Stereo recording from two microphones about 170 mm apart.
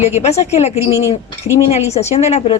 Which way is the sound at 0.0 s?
40° left (ahead or behind).